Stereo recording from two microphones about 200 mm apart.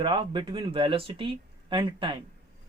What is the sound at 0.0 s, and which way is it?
Speech, 25° right (ahead or behind).